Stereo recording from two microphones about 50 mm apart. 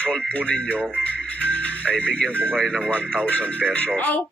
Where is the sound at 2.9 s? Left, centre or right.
Left.